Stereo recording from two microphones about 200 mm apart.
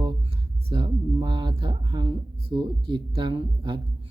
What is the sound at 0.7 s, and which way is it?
Speech, 25° right (ahead or behind).